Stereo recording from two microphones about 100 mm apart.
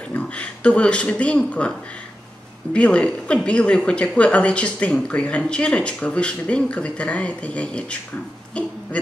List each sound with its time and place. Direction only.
0.1 s speech: 15° left (ahead or behind)